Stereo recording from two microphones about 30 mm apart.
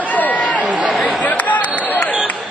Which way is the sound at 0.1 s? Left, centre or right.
Left.